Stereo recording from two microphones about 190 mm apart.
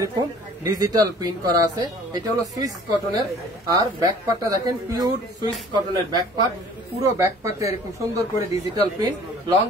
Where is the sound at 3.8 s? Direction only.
20° right (ahead or behind).